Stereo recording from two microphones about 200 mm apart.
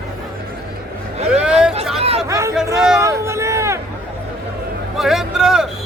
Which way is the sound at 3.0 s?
15° right (ahead or behind).